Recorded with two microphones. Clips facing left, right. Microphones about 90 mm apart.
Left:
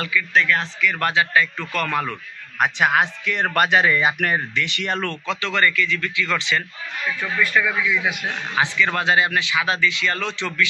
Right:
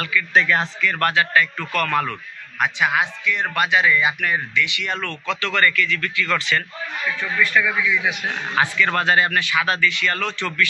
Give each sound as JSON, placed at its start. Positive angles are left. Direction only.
{"t": 0.3, "sound": "speech", "side_deg": -5}
{"t": 0.8, "sound": "speech", "side_deg": 10}
{"t": 2.6, "sound": "speech", "side_deg": 45}
{"t": 5.2, "sound": "speech", "side_deg": 25}
{"t": 7.2, "sound": "speech", "side_deg": 10}